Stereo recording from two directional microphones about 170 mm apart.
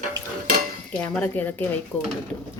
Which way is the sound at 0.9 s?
10° left (ahead or behind).